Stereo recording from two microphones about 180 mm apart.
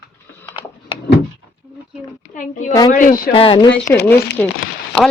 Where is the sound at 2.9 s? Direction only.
50° left (ahead or behind).